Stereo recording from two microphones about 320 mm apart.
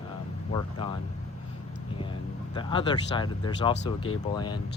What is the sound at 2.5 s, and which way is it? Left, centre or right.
Speech, centre.